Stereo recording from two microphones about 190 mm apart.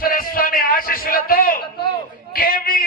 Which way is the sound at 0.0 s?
50° left (ahead or behind).